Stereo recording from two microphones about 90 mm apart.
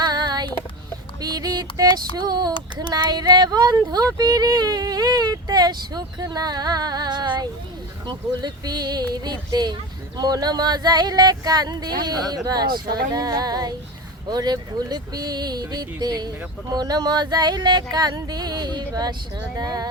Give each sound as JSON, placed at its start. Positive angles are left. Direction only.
{"t": 0.0, "sound": "child singing", "side_deg": -50}
{"t": 1.2, "sound": "a sound", "side_deg": -45}
{"t": 2.1, "sound": "speech", "side_deg": -45}